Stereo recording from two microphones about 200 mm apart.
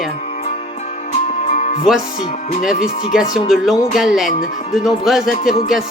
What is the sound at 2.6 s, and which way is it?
Music, centre (ahead or behind).